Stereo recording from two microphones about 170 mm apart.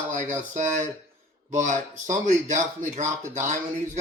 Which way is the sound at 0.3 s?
45° right (ahead or behind).